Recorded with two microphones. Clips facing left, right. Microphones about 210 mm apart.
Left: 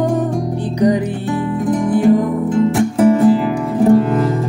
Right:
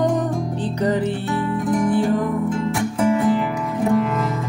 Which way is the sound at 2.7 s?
35° left (ahead or behind).